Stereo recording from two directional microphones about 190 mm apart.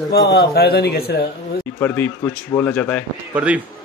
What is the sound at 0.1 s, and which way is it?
A man's voice, 60° left (ahead or behind).